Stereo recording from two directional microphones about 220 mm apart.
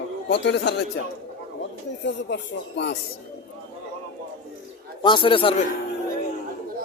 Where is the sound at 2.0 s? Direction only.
55° left (ahead or behind).